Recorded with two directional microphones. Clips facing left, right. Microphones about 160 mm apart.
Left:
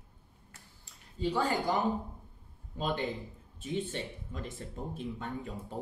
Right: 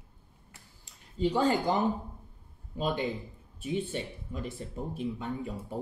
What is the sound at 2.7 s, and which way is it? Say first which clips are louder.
Speech: right 2 dB; 15° right (ahead or behind).